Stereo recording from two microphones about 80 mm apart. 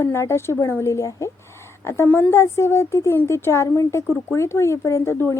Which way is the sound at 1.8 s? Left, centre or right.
Left.